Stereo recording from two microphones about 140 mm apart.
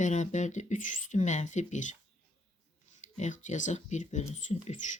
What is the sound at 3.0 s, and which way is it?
Speech, 60° left (ahead or behind).